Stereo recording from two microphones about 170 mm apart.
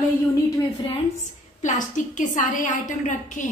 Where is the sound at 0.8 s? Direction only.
45° left (ahead or behind).